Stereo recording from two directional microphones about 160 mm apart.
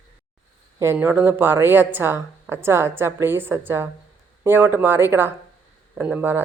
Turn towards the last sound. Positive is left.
turn(degrees=-15)  # may be behind; listen again after turning